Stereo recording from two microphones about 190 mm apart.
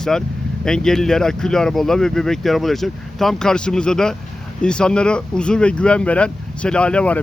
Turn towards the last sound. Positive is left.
turn(degrees=5)  # may be behind; listen again after turning